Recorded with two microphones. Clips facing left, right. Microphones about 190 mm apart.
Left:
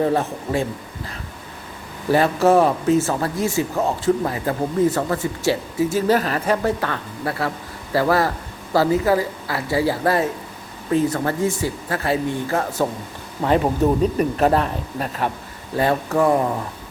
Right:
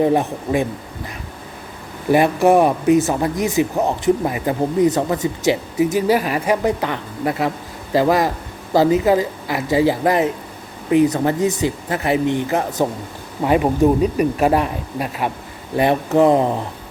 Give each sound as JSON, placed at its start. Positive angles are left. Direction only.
{"t": 0.0, "sound": "speech", "side_deg": -15}
{"t": 2.1, "sound": "speech", "side_deg": -15}